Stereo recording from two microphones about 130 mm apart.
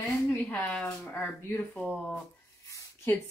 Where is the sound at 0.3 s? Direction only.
10° left (ahead or behind).